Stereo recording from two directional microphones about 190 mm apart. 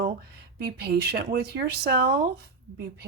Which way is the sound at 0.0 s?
60° right (ahead or behind).